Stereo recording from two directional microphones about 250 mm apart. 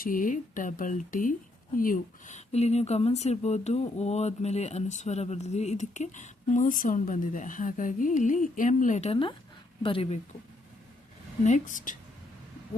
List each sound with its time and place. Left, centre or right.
0.0 s speech: left
11.4 s a woman's voice: left